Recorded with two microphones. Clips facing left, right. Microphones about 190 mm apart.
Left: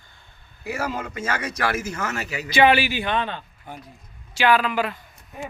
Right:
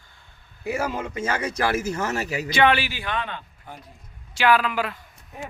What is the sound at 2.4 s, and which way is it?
Speech, 5° left (ahead or behind).